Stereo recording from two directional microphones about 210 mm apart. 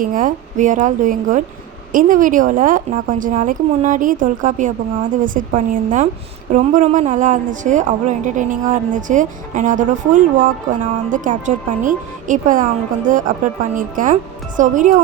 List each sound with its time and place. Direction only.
0.0 s a woman's voice: 40° right (ahead or behind)